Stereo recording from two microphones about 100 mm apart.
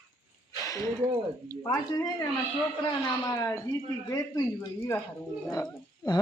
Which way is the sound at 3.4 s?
25° left (ahead or behind).